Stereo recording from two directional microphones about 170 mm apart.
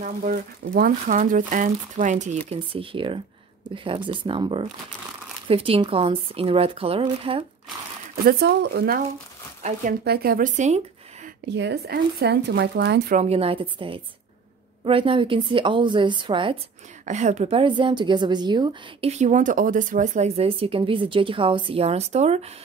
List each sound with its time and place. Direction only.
0.0 s a woman's voice: 55° right (ahead or behind); by 7.4 s 35° right (ahead or behind)
8.3 s speech: 70° right (ahead or behind)
9.6 s speech: 45° right (ahead or behind)
10.0 s speech: 65° right (ahead or behind); by 10.8 s 45° right (ahead or behind)
11.4 s speech: 85° right
13.1 s a woman's voice: 40° right (ahead or behind)
17.0 s a woman's voice: 45° right (ahead or behind)